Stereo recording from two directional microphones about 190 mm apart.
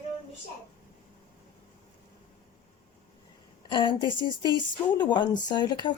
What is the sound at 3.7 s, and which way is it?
Speech, 25° left (ahead or behind).